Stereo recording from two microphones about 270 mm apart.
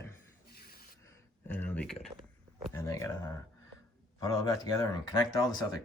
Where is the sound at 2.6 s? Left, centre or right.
Centre.